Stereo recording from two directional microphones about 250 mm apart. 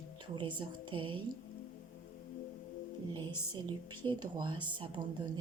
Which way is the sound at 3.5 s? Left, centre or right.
Centre.